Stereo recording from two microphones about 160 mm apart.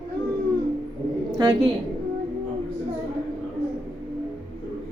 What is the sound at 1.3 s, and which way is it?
Speech, 25° right (ahead or behind).